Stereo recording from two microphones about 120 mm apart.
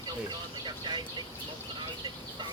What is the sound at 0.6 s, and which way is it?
Speech, 40° right (ahead or behind).